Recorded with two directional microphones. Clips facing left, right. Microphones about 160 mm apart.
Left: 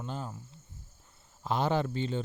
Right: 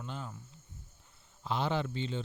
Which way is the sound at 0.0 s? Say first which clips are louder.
Left 4 dB; 35° left (ahead or behind).